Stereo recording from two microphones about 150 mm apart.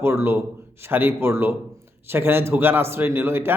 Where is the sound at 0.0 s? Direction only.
15° right (ahead or behind).